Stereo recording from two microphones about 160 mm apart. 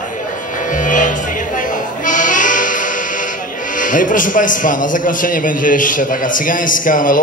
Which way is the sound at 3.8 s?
55° left (ahead or behind).